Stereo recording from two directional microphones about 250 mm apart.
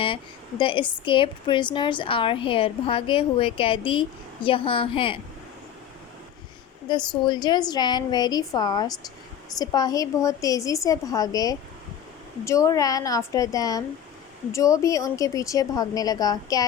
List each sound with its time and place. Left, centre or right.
0.0 s speech: centre
6.8 s a woman's voice: centre